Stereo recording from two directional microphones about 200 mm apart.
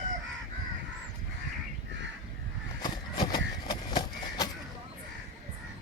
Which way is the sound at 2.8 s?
20° left (ahead or behind).